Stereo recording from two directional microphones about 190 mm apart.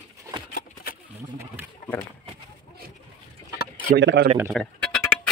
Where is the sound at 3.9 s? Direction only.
65° right (ahead or behind).